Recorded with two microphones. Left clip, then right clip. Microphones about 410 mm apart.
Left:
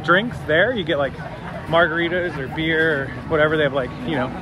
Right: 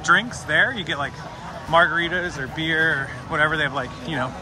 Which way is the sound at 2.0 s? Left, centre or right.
Right.